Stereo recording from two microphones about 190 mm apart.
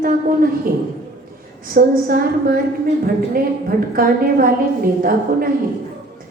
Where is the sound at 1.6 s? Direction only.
50° right (ahead or behind).